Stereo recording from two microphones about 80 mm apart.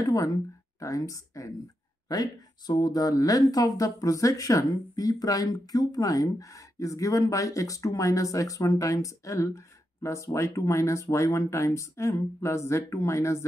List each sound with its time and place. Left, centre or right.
0.0 s speech: left